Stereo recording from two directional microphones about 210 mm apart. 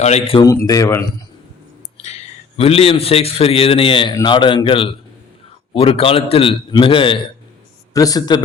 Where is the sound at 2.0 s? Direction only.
30° left (ahead or behind).